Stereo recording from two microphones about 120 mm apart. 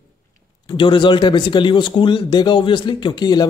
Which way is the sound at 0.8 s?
45° left (ahead or behind).